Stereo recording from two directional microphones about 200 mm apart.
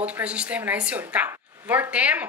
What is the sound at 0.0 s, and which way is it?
A woman's voice, 5° right (ahead or behind).